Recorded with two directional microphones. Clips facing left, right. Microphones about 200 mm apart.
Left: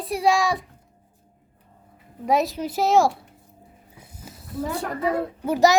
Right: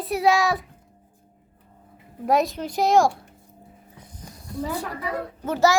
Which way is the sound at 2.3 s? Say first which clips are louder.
Even; centre (ahead or behind).